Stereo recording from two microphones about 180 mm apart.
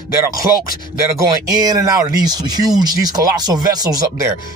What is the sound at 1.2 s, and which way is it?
Speech, 20° right (ahead or behind).